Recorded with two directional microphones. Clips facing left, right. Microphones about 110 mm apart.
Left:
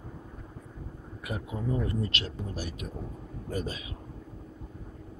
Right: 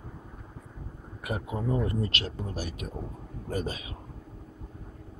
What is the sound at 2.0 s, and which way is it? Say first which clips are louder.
Speech: right 1 dB; 55° right (ahead or behind).